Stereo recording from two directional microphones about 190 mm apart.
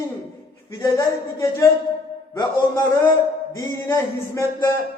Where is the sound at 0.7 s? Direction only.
15° left (ahead or behind).